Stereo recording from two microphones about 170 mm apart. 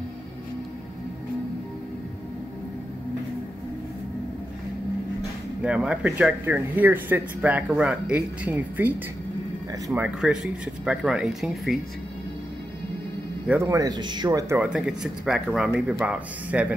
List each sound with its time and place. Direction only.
5.6 s speech: 5° right (ahead or behind)
9.9 s speech: 5° right (ahead or behind)
13.5 s speech: 15° right (ahead or behind)
14.6 s speech: 5° right (ahead or behind)